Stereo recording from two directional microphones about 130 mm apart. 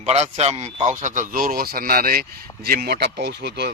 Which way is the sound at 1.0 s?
75° right (ahead or behind).